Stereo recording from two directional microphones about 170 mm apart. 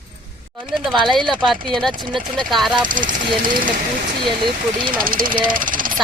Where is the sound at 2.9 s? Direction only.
55° right (ahead or behind).